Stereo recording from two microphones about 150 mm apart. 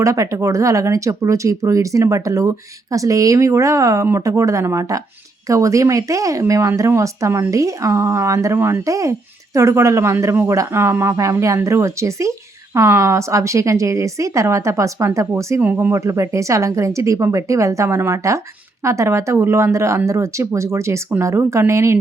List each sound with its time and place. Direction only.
0.0 s speech: 20° right (ahead or behind)